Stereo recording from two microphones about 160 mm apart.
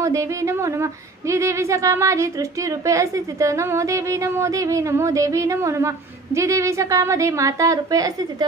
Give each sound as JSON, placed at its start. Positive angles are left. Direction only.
{"t": 0.0, "sound": "speech", "side_deg": -20}